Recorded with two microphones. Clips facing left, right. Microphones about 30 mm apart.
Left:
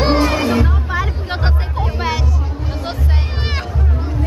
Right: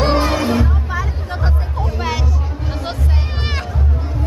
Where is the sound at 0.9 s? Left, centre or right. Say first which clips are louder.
Left 3 dB; left.